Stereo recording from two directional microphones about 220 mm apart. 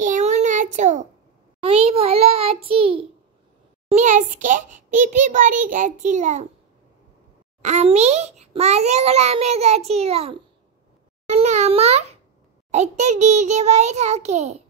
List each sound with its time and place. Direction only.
0.0 s child singing: 35° right (ahead or behind)
1.6 s a sound: 25° right (ahead or behind)
3.9 s a child's voice: 35° right (ahead or behind)
7.6 s a child's voice: 30° right (ahead or behind)